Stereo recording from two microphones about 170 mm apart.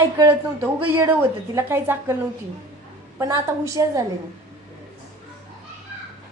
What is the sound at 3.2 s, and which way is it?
Speech, 20° right (ahead or behind).